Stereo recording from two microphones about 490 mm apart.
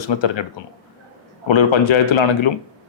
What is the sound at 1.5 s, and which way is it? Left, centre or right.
Speech, left.